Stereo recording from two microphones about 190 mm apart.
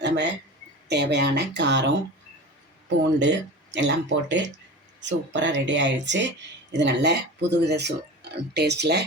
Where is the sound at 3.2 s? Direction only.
65° right (ahead or behind).